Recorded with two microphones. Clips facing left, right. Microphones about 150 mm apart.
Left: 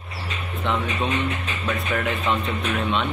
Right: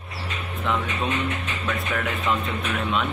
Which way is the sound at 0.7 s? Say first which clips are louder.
Left 1 dB; 5° right (ahead or behind).